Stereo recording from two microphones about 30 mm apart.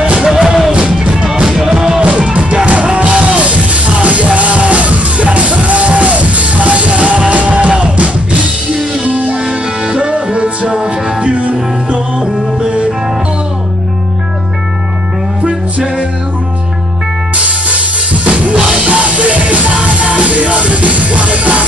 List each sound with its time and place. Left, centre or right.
0.2 s music: centre
0.7 s music: right
1.2 s music: right
2.0 s music: right
3.3 s music: right
15.4 s music: right
18.2 s drum kit: right
18.9 s music: right